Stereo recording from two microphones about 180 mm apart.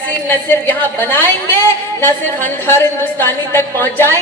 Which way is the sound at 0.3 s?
10° left (ahead or behind).